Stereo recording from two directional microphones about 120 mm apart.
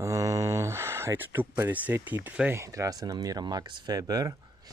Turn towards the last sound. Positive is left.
turn(degrees=-30)  # may be behind; listen again after turning